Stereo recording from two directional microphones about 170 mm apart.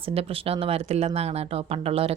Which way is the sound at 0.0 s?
35° right (ahead or behind).